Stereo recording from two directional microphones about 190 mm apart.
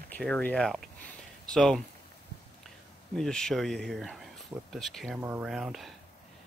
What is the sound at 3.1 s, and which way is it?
Speech, 5° left (ahead or behind).